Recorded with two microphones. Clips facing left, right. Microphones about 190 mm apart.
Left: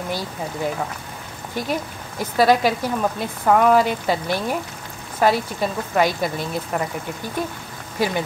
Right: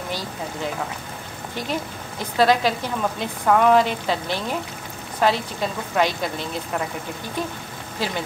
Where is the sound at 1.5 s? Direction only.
10° left (ahead or behind).